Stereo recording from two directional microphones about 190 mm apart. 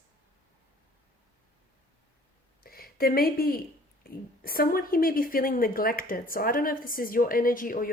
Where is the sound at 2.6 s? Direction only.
50° left (ahead or behind).